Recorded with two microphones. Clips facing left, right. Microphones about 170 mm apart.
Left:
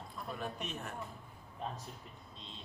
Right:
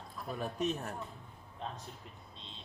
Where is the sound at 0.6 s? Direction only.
40° right (ahead or behind).